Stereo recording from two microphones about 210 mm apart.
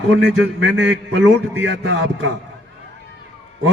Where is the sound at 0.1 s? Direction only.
60° right (ahead or behind).